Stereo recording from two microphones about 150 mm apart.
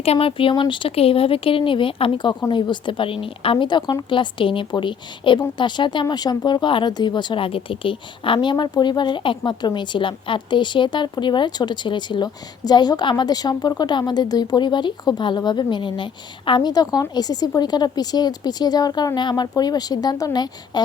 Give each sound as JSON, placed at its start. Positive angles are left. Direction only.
{"t": 0.0, "sound": "a woman's voice", "side_deg": 40}